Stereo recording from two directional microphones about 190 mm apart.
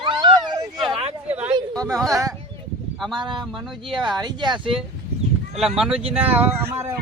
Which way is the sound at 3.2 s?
25° right (ahead or behind).